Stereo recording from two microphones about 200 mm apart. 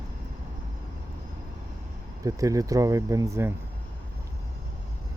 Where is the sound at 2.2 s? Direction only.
15° right (ahead or behind).